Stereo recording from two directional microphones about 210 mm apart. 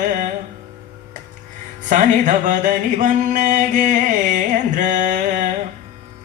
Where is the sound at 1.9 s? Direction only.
35° right (ahead or behind).